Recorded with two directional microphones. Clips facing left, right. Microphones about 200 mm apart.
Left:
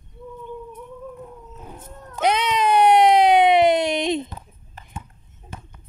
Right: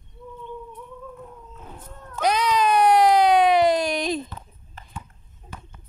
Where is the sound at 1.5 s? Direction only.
20° left (ahead or behind).